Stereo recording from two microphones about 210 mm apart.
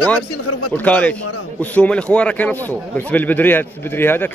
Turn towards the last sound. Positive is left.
turn(degrees=10)  # may be behind; listen again after turning